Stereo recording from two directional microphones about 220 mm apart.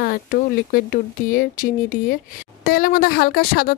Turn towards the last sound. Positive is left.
turn(degrees=45)  # may be behind; listen again after turning